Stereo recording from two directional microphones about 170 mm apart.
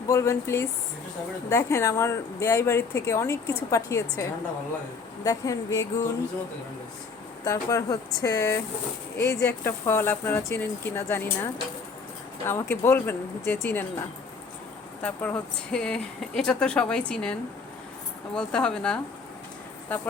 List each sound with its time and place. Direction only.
0.1 s speech: 15° left (ahead or behind)
7.4 s speech: 20° left (ahead or behind)
12.5 s speech: 15° left (ahead or behind)
15.0 s speech: 10° left (ahead or behind)
18.3 s speech: 5° left (ahead or behind)